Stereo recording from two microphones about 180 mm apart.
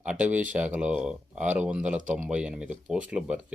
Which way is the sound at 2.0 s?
45° right (ahead or behind).